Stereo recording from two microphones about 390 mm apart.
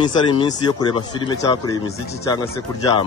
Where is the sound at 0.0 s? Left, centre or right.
Centre.